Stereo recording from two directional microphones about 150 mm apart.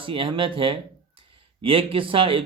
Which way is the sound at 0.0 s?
35° right (ahead or behind).